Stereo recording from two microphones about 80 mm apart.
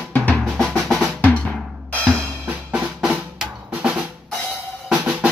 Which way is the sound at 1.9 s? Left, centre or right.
Centre.